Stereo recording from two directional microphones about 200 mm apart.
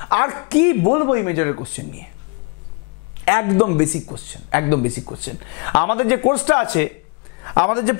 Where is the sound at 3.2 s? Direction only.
20° left (ahead or behind).